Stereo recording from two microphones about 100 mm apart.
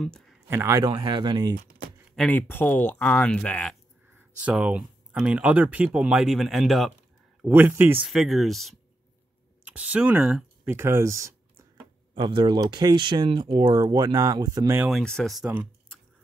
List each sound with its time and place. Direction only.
0.0 s speech: 5° left (ahead or behind)
0.5 s speech: 30° right (ahead or behind)
0.8 s speech: 50° right (ahead or behind)
2.1 s speech: 15° left (ahead or behind)
3.3 s speech: 10° left (ahead or behind)
4.1 s speech: 15° right (ahead or behind)
7.4 s speech: 20° right (ahead or behind)
8.1 s speech: centre (ahead or behind)
9.7 s speech: 15° right (ahead or behind)
10.7 s speech: 25° right (ahead or behind)
11.7 s a sound: 55° right (ahead or behind)
12.5 s speech: 45° right (ahead or behind)
14.9 s speech: 5° left (ahead or behind)
15.4 s speech: 15° right (ahead or behind)